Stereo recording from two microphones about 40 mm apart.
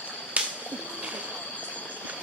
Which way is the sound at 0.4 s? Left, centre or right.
Right.